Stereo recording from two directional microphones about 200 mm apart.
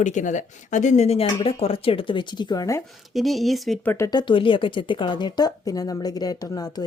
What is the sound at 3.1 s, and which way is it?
Speech, centre (ahead or behind).